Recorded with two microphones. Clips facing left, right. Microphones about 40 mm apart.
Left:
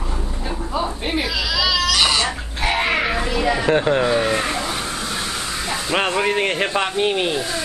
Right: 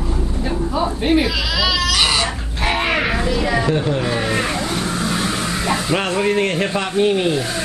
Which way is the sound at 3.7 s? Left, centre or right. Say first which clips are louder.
Left 2 dB; left.